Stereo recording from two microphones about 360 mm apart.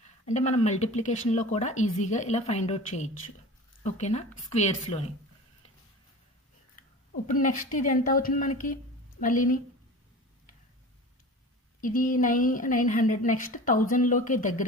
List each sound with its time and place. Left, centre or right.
0.0 s a woman's voice: centre
7.3 s a woman's voice: left
11.8 s a woman's voice: left